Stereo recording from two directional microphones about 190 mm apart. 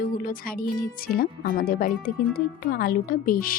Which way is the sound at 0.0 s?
45° left (ahead or behind).